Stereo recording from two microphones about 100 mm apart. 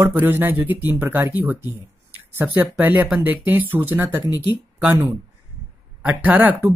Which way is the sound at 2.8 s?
15° right (ahead or behind).